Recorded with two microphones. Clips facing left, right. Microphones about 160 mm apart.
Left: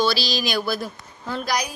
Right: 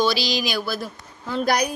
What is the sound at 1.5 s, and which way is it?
Speech, 60° right (ahead or behind).